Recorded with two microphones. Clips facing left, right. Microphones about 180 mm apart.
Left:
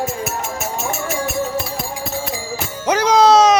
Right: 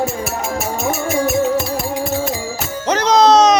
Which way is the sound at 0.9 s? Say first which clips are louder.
Right 7 dB; 40° right (ahead or behind).